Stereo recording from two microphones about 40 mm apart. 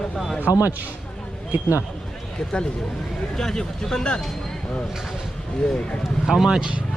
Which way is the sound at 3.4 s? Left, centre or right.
Centre.